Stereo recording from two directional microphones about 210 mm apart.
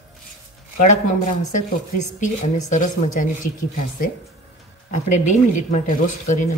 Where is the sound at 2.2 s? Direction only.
35° left (ahead or behind).